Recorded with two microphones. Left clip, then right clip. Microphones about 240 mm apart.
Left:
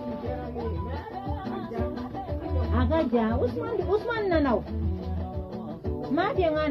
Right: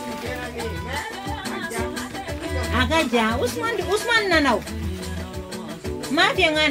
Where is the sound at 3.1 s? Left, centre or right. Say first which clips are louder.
Right 5 dB; right.